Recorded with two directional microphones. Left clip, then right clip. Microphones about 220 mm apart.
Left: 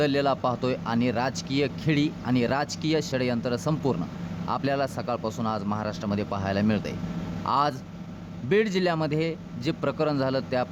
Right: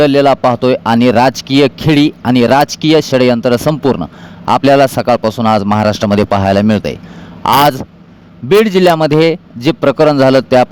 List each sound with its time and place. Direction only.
0.0 s speech: 45° right (ahead or behind)